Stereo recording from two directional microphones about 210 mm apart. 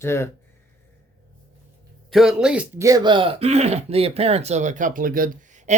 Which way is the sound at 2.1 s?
Centre (ahead or behind).